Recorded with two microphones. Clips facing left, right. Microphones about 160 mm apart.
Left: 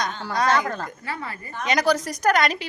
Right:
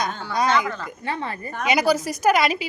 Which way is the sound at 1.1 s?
25° right (ahead or behind).